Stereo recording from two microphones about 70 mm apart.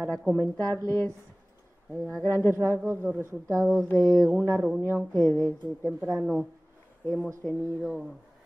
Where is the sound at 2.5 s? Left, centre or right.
Right.